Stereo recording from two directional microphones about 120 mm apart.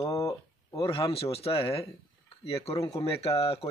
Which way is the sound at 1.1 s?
55° left (ahead or behind).